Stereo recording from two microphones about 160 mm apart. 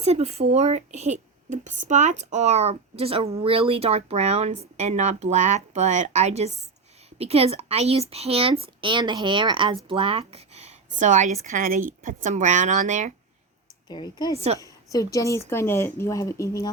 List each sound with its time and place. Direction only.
0.0 s a woman's voice: 40° right (ahead or behind)
13.8 s a woman's voice: 25° left (ahead or behind)
14.3 s speech: 40° right (ahead or behind)
14.6 s a woman's voice: 20° left (ahead or behind)